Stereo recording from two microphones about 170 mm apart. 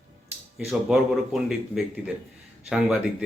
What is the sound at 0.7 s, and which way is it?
A man's voice, centre (ahead or behind).